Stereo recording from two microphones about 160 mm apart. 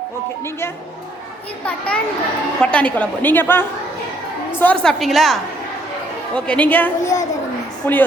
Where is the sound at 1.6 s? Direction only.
10° left (ahead or behind).